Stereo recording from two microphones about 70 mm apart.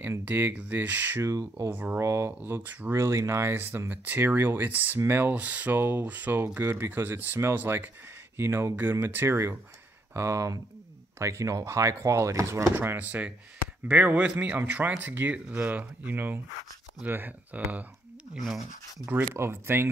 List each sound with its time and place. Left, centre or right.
0.2 s speech: right
1.2 s speech: right
1.7 s speech: right
2.0 s speech: right
2.9 s speech: right
5.8 s speech: right
6.6 s speech: right
6.9 s speech: right
12.7 s speech: right
19.3 s speech: right